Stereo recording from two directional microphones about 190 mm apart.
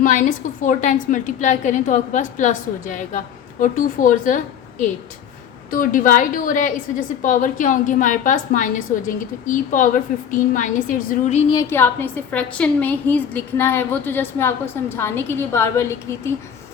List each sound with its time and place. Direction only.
0.0 s a woman's voice: 45° left (ahead or behind)
5.7 s a woman's voice: 45° left (ahead or behind)
11.5 s a woman's voice: 10° left (ahead or behind)